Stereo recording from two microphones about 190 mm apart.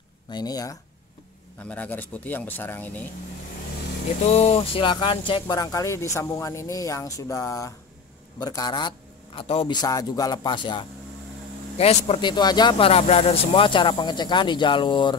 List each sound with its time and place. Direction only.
0.3 s speech: 20° left (ahead or behind)
1.6 s speech: 10° left (ahead or behind)
4.2 s speech: 35° left (ahead or behind)